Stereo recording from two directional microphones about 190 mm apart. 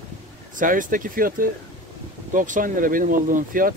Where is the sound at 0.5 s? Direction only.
45° right (ahead or behind).